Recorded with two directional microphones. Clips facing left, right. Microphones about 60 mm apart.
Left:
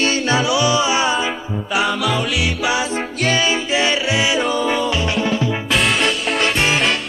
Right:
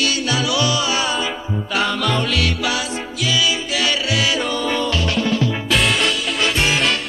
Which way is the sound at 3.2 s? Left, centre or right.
Left.